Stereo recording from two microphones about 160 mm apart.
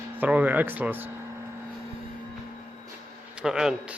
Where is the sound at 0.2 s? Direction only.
10° right (ahead or behind).